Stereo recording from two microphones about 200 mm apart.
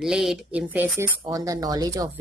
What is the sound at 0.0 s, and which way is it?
Speech, centre (ahead or behind).